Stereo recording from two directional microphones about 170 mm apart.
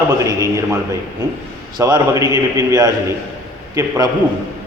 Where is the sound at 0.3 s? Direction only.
20° right (ahead or behind).